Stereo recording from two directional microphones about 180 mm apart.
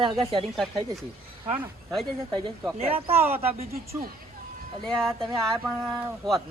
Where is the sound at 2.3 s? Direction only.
25° right (ahead or behind).